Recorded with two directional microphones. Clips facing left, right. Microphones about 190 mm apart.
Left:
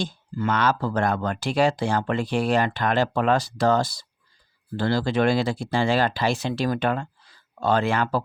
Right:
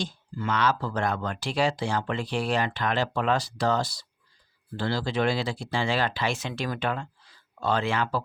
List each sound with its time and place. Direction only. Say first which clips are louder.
0.0 s speech: left 5 dB; 50° left (ahead or behind)